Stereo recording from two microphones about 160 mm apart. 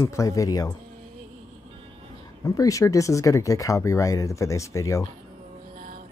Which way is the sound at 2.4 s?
20° left (ahead or behind).